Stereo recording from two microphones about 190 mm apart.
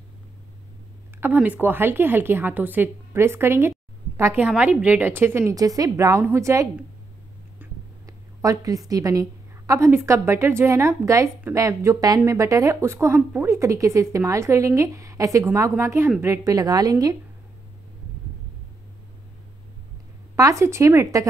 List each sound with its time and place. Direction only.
1.2 s speech: 10° right (ahead or behind)
8.1 s speech: 15° right (ahead or behind)
20.3 s speech: 15° right (ahead or behind)